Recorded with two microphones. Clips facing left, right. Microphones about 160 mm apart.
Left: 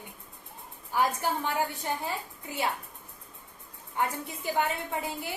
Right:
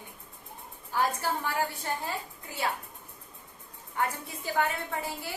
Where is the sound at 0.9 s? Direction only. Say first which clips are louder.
Left 1 dB; 20° left (ahead or behind).